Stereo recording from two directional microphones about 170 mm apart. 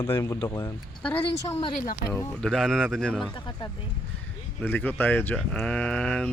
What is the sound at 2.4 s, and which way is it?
Speech, 5° left (ahead or behind).